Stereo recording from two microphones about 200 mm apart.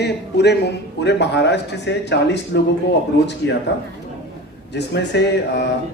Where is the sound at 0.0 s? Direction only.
55° left (ahead or behind).